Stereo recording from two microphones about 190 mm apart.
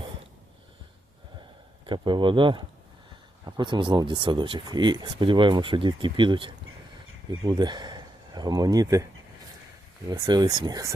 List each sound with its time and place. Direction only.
1.9 s speech: 25° right (ahead or behind)
10.1 s speech: 20° right (ahead or behind)